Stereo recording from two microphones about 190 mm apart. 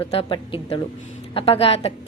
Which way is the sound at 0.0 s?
30° left (ahead or behind).